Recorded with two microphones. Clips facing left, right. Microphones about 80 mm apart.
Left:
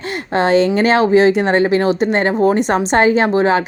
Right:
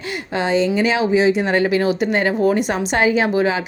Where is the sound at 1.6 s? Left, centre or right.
Left.